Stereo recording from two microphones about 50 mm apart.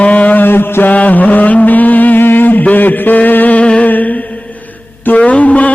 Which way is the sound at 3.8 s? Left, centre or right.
Left.